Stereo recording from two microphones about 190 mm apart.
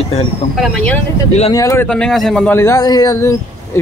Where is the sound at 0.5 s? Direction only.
Centre (ahead or behind).